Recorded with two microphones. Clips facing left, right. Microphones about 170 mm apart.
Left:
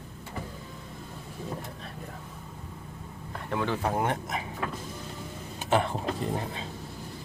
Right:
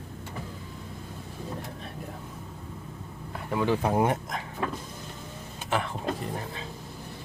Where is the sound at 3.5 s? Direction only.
10° right (ahead or behind).